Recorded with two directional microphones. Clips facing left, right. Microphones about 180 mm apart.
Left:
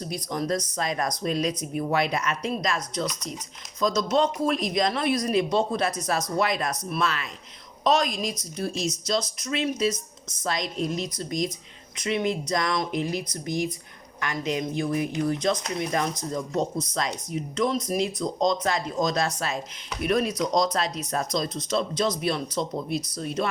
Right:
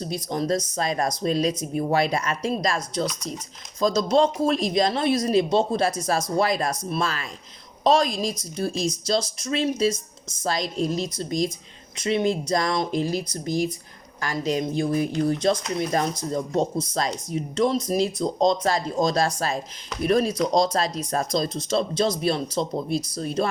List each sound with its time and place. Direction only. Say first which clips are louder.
0.0 s speech: right 3 dB; 30° right (ahead or behind)